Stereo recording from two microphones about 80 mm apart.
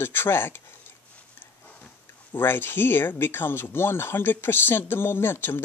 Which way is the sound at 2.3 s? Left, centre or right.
Left.